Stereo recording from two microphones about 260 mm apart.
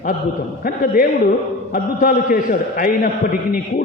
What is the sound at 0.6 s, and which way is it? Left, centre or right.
A man's voice, left.